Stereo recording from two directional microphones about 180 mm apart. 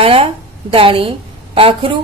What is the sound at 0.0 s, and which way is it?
A woman's voice, 30° right (ahead or behind).